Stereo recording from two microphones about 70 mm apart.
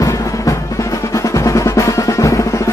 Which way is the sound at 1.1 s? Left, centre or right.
Left.